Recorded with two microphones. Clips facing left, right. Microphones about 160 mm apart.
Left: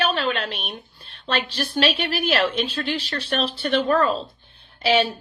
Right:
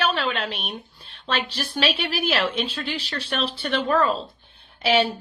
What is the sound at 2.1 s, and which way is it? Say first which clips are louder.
A woman's voice: left 2 dB; 60° left (ahead or behind).